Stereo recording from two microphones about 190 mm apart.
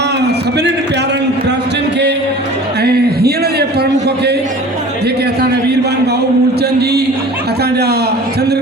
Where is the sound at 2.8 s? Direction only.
55° right (ahead or behind).